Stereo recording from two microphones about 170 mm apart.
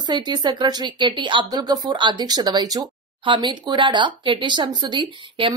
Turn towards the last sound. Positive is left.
turn(degrees=-25)  # may be behind; listen again after turning